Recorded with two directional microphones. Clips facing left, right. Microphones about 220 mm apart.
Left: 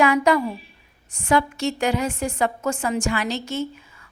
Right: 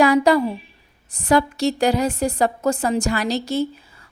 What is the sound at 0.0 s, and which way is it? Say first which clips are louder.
A woman's voice: right 3 dB; 35° right (ahead or behind).